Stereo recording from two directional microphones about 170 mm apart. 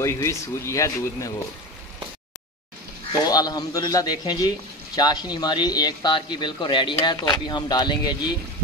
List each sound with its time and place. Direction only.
0.0 s speech: 15° left (ahead or behind)
3.1 s speech: 25° left (ahead or behind)